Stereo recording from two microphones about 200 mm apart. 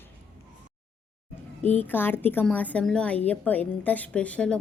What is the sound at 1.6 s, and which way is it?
A woman's voice, 10° left (ahead or behind).